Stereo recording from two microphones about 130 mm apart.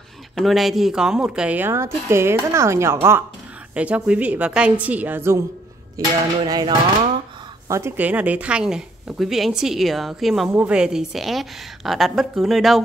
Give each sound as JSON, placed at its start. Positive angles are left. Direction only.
{"t": 0.4, "sound": "a woman's voice", "side_deg": 0}
{"t": 3.7, "sound": "a woman's voice", "side_deg": -10}
{"t": 5.9, "sound": "speech", "side_deg": -30}
{"t": 7.6, "sound": "speech", "side_deg": -20}